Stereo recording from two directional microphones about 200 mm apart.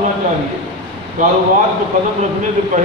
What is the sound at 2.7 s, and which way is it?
Speech, 40° right (ahead or behind).